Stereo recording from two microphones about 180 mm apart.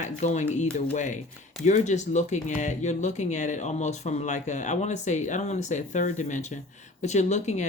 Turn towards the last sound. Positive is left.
turn(degrees=40)  # may be behind; listen again after turning